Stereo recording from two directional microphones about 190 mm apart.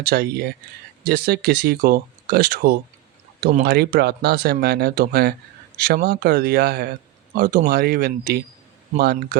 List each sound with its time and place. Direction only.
0.0 s speech: 55° right (ahead or behind)